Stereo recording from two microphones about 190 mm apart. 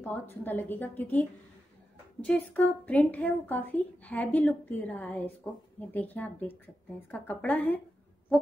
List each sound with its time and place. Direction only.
0.0 s a woman's voice: 10° left (ahead or behind)
2.2 s a woman's voice: 10° left (ahead or behind)